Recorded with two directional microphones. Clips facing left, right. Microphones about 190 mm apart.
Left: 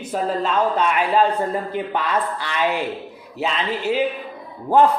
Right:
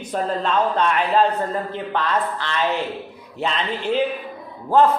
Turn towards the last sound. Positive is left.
turn(degrees=15)  # may be behind; listen again after turning